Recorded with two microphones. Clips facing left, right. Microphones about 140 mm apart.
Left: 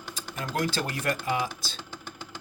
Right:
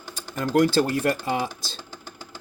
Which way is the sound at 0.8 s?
30° right (ahead or behind).